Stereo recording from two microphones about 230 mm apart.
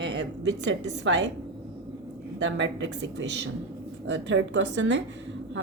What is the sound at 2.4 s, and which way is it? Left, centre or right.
Speech, right.